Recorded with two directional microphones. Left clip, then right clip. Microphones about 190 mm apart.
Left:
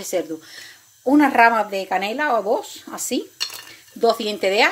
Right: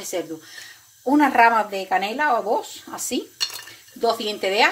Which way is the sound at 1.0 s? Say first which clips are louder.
Left 1 dB; 30° left (ahead or behind).